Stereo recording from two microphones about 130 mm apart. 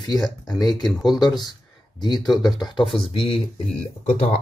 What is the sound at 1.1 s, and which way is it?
Speech, 35° left (ahead or behind).